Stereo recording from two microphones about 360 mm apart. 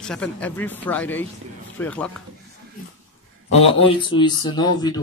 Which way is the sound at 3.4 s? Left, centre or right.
Centre.